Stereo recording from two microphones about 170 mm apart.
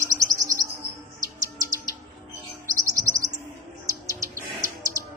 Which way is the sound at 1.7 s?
20° right (ahead or behind).